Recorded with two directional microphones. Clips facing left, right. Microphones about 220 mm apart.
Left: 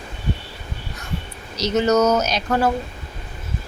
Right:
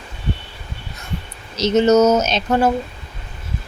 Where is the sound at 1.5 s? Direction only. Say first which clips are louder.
Right 4 dB; 25° right (ahead or behind).